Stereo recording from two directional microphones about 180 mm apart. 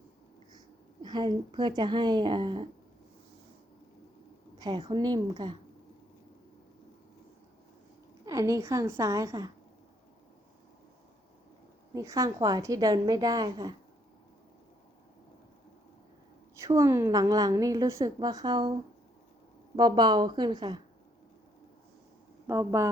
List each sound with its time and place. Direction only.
1.0 s a woman's voice: 25° right (ahead or behind)
4.5 s a woman's voice: 25° right (ahead or behind)
8.2 s a woman's voice: 20° right (ahead or behind)
11.9 s a woman's voice: 20° right (ahead or behind)
16.6 s a woman's voice: 15° right (ahead or behind)
19.7 s a woman's voice: 25° right (ahead or behind)
22.4 s a woman's voice: 15° right (ahead or behind)